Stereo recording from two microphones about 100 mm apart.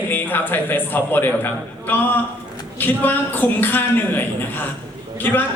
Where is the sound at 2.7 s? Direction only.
20° left (ahead or behind).